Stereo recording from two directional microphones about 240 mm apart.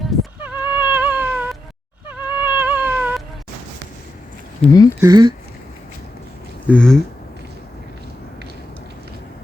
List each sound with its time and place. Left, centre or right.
0.0 s a sound: centre
0.9 s cat: centre
2.0 s a sound: centre
2.6 s cat: centre
4.6 s speech: centre
4.9 s speech: centre
6.7 s speech: centre